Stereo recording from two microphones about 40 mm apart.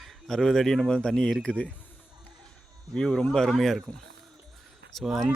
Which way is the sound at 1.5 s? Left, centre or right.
Left.